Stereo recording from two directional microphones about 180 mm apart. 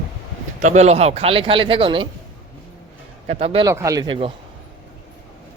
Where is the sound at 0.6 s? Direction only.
40° right (ahead or behind).